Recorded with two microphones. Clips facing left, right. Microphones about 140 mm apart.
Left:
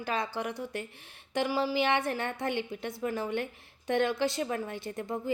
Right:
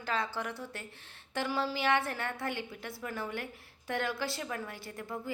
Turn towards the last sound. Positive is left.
turn(degrees=20)  # may be behind; listen again after turning